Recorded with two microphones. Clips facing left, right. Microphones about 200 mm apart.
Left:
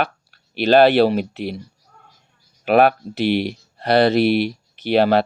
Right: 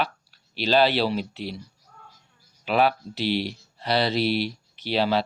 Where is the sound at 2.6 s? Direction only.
55° left (ahead or behind).